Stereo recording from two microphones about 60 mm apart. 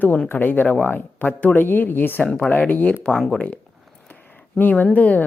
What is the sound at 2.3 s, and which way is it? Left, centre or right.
Speech, left.